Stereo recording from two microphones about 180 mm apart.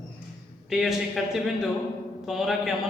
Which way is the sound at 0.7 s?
Centre (ahead or behind).